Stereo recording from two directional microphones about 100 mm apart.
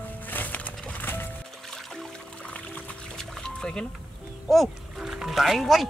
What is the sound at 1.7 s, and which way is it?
Music, 10° left (ahead or behind).